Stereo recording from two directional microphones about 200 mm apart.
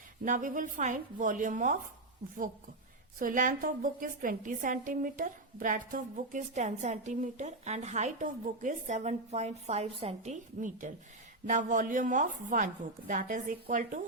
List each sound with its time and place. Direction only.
0.3 s a woman's voice: 40° right (ahead or behind)
3.2 s a woman's voice: 40° right (ahead or behind)